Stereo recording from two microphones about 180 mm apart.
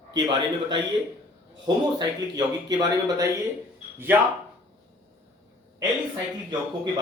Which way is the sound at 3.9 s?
10° right (ahead or behind).